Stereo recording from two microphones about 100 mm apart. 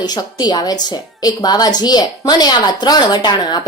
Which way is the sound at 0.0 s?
45° left (ahead or behind).